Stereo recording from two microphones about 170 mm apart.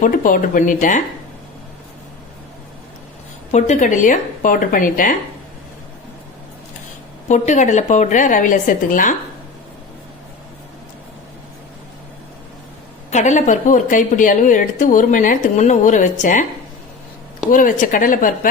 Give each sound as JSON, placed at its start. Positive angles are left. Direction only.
{"t": 0.0, "sound": "a woman's voice", "side_deg": 50}
{"t": 3.5, "sound": "a woman's voice", "side_deg": 45}
{"t": 7.3, "sound": "a woman's voice", "side_deg": 45}
{"t": 13.1, "sound": "a woman's voice", "side_deg": 45}
{"t": 17.5, "sound": "a woman's voice", "side_deg": 50}